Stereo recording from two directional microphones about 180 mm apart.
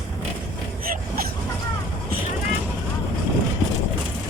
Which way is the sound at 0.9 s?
55° right (ahead or behind).